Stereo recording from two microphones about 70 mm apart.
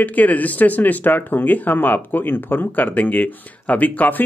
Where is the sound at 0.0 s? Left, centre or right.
Left.